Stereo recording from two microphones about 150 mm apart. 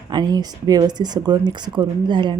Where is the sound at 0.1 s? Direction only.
30° right (ahead or behind).